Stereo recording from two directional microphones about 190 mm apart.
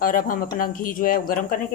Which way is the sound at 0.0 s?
45° left (ahead or behind).